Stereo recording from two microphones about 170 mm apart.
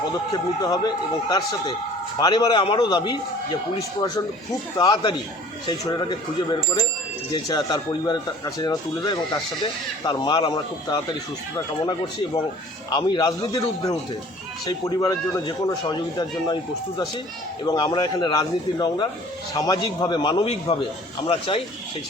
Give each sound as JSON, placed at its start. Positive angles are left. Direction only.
{"t": 0.6, "sound": "speech", "side_deg": 25}
{"t": 17.7, "sound": "speech", "side_deg": 25}